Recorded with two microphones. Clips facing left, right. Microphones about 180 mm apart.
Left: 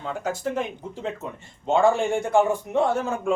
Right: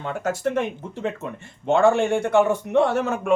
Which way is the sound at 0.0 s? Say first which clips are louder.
Right 3 dB; 70° right (ahead or behind).